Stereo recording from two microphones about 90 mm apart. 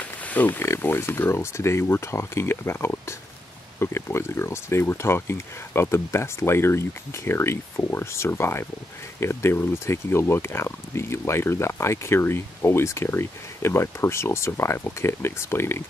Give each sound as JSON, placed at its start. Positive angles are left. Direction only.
{"t": 0.0, "sound": "speech", "side_deg": 20}